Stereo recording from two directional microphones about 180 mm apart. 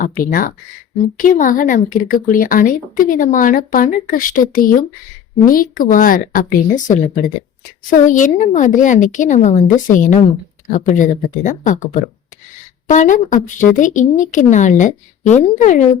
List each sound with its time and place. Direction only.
0.0 s speech: 50° left (ahead or behind)